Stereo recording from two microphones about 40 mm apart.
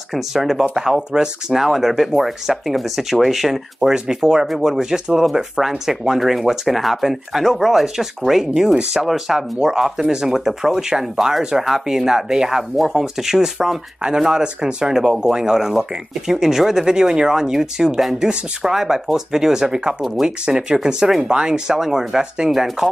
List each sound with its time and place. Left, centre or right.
0.1 s speech: centre